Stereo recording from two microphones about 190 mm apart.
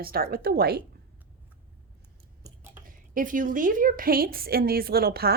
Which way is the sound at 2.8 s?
45° right (ahead or behind).